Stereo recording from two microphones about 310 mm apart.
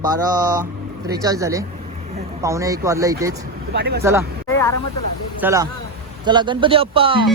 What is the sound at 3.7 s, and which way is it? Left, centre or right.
Speech, right.